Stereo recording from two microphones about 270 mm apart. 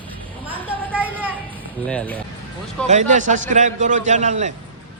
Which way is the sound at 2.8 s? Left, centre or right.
Right.